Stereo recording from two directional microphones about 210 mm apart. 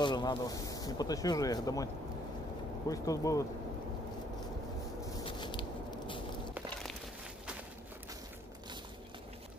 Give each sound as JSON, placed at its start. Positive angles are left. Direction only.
{"t": 0.0, "sound": "speech", "side_deg": 20}
{"t": 2.9, "sound": "speech", "side_deg": 15}
{"t": 5.2, "sound": "biting", "side_deg": 25}